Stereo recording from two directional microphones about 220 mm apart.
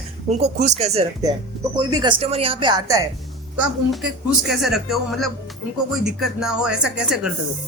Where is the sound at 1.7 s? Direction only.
20° right (ahead or behind).